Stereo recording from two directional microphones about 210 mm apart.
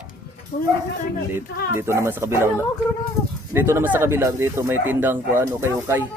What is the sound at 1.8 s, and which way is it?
Speech, 15° right (ahead or behind).